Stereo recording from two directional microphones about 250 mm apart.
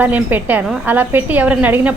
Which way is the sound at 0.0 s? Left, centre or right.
Centre.